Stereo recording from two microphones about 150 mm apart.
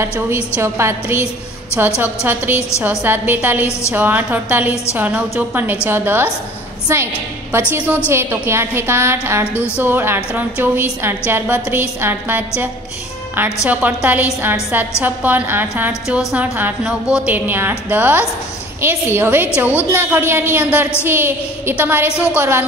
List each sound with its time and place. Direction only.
0.6 s a woman's voice: 15° right (ahead or behind)
13.7 s a woman's voice: 10° right (ahead or behind)